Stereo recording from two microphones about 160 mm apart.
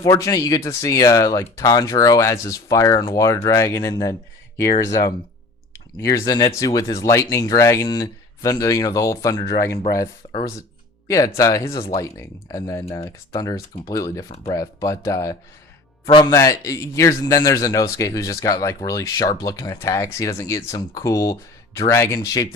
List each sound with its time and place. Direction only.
0.0 s a man's voice: 20° left (ahead or behind)
14.3 s speech: 35° left (ahead or behind)
14.5 s a man's voice: 20° left (ahead or behind)